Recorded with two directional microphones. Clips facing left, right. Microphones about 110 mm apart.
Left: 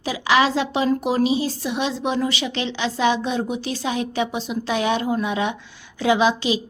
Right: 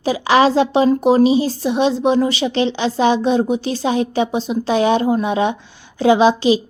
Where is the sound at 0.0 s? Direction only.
35° right (ahead or behind).